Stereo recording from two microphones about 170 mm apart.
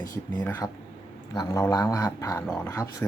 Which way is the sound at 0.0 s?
20° left (ahead or behind).